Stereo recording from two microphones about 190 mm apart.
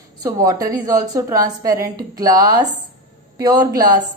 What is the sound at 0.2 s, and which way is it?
A woman's voice, 20° right (ahead or behind).